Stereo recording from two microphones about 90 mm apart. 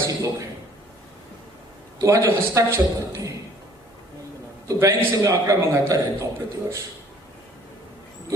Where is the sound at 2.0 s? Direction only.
35° right (ahead or behind).